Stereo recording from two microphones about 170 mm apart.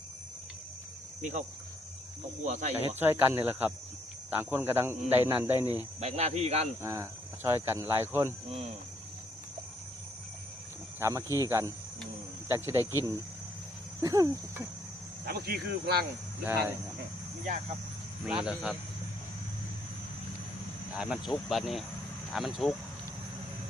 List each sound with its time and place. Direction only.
1.2 s speech: 45° right (ahead or behind)
3.0 s speech: 15° right (ahead or behind)
6.0 s cricket: 40° right (ahead or behind)
6.8 s speech: 15° right (ahead or behind)
11.0 s speech: 15° right (ahead or behind)
12.8 s speech: 20° left (ahead or behind)
14.0 s cricket: 20° right (ahead or behind)
15.3 s speech: 70° right (ahead or behind)
16.4 s speech: 15° right (ahead or behind)
18.4 s speech: 5° right (ahead or behind)
20.9 s speech: 5° right (ahead or behind)